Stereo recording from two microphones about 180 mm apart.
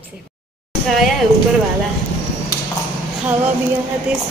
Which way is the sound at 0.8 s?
Centre (ahead or behind).